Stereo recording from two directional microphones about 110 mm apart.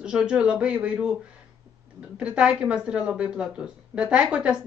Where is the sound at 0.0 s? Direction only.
10° right (ahead or behind).